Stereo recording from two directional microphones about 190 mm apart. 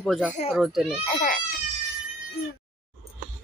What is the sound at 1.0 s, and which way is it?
Speech, 40° left (ahead or behind).